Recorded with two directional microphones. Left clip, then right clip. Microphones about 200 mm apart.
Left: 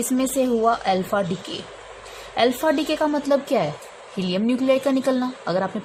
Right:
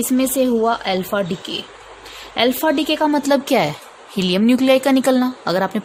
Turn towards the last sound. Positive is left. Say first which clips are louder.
# right 5 dB
turn(degrees=-45)  # may be behind; listen again after turning